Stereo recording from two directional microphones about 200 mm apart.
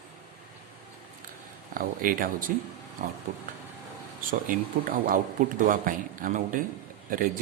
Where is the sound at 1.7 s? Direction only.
45° right (ahead or behind).